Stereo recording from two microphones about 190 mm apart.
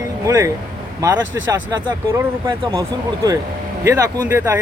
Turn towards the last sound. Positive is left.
turn(degrees=-10)  # may be behind; listen again after turning